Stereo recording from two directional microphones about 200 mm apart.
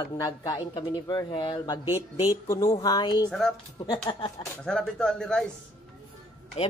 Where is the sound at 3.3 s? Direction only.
Centre (ahead or behind).